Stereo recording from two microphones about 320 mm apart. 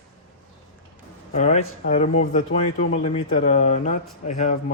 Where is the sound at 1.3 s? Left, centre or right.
Left.